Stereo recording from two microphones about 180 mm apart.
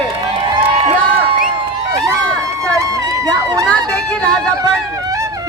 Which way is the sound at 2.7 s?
20° right (ahead or behind).